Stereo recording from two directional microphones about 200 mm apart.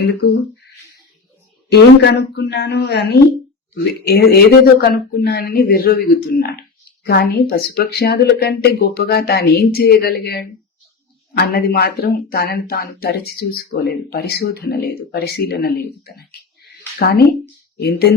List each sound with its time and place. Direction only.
0.0 s a woman's voice: 55° left (ahead or behind)
1.7 s a woman's voice: 55° left (ahead or behind)